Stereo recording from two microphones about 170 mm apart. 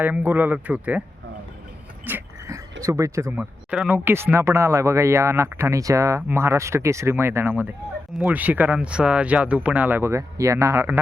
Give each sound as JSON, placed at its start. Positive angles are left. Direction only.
{"t": 0.0, "sound": "speech", "side_deg": -10}
{"t": 2.0, "sound": "a sound", "side_deg": -10}
{"t": 2.8, "sound": "speech", "side_deg": -20}